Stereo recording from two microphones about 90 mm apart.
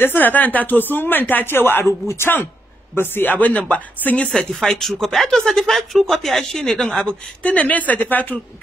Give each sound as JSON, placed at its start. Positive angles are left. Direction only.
{"t": 0.0, "sound": "speech", "side_deg": 20}
{"t": 4.3, "sound": "speech", "side_deg": 5}